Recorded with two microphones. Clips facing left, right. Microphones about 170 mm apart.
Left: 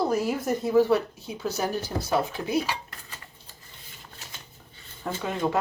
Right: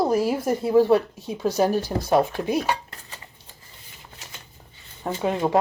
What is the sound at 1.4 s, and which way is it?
A woman's voice, 40° right (ahead or behind).